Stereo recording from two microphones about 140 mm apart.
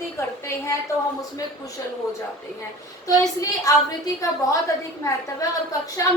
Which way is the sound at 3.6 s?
25° left (ahead or behind).